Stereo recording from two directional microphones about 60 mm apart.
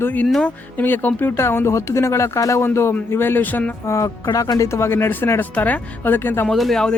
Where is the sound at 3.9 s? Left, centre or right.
Left.